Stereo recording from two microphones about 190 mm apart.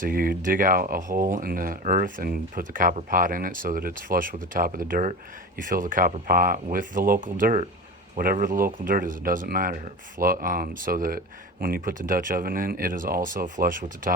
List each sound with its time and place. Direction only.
0.0 s speech: 50° right (ahead or behind)